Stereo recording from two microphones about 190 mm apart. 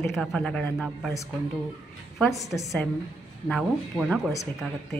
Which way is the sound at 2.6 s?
Centre (ahead or behind).